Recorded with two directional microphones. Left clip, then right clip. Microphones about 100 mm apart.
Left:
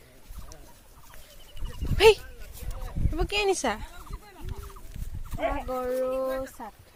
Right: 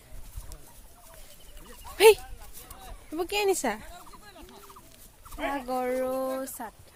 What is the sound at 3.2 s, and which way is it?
Speech, 25° right (ahead or behind).